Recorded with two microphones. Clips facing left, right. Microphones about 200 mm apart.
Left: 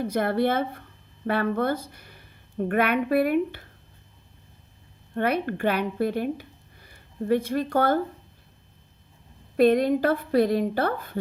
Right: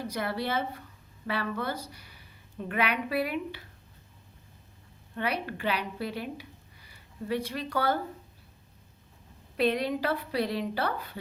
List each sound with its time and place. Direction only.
0.0 s a woman's voice: 55° left (ahead or behind)
5.1 s a woman's voice: 50° left (ahead or behind)
9.6 s a woman's voice: 50° left (ahead or behind)